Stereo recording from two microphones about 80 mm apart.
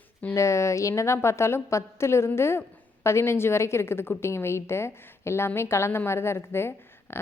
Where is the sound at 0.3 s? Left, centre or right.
Left.